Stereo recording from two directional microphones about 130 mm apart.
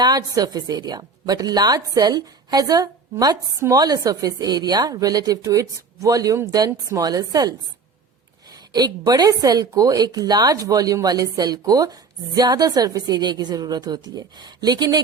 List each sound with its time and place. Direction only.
0.0 s a woman's voice: 30° right (ahead or behind)
8.7 s a woman's voice: 30° right (ahead or behind)